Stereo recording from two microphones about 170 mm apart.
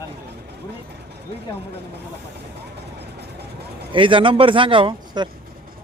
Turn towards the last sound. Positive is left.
turn(degrees=-30)  # may be behind; listen again after turning